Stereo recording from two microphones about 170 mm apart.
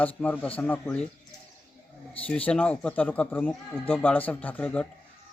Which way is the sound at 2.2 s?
5° left (ahead or behind).